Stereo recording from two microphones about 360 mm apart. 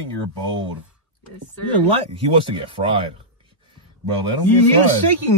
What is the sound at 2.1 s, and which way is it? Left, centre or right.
Speech, centre.